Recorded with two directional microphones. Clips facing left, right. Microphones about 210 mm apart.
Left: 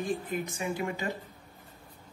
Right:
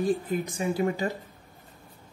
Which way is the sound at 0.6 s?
35° right (ahead or behind).